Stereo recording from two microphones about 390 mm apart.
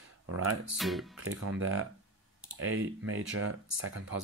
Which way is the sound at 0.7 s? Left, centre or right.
Centre.